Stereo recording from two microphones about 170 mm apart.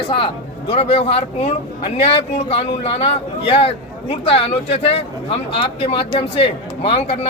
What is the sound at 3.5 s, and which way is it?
A man's voice, 35° left (ahead or behind).